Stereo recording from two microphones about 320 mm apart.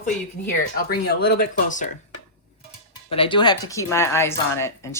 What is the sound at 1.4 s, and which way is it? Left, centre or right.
Speech, left.